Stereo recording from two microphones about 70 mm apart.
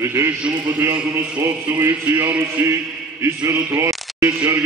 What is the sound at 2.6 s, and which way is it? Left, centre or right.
Speech, right.